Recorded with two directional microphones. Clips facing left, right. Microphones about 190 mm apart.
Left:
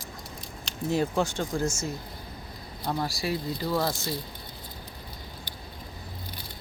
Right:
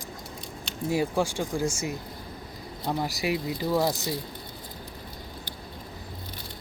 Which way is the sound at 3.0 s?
15° right (ahead or behind).